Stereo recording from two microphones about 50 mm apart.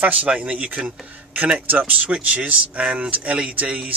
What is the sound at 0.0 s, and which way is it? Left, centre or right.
Speech, right.